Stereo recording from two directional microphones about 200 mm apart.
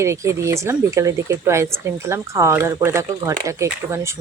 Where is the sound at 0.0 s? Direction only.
15° right (ahead or behind).